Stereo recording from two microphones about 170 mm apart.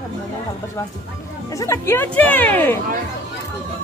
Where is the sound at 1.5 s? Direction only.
20° left (ahead or behind).